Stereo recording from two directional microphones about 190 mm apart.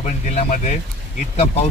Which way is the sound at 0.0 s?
40° left (ahead or behind).